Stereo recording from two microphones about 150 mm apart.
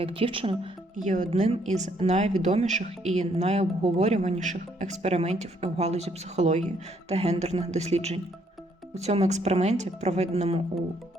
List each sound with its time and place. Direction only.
0.0 s speech: 35° right (ahead or behind)
0.9 s a woman's voice: 55° right (ahead or behind)